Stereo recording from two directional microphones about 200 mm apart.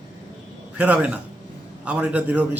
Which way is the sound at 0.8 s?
5° right (ahead or behind).